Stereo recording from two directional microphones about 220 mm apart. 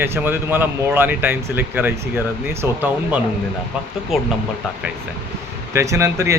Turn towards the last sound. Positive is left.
turn(degrees=-15)  # may be behind; listen again after turning